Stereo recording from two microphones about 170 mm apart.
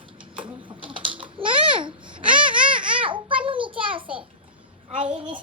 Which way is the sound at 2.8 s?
30° right (ahead or behind).